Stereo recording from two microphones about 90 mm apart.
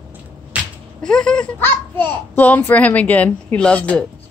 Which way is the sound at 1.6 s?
20° left (ahead or behind).